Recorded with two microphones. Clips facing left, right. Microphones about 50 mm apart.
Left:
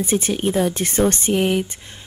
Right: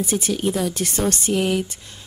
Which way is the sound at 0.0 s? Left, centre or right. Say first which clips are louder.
Left 2 dB; left.